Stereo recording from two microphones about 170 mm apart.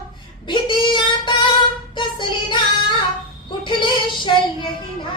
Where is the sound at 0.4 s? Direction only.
25° left (ahead or behind).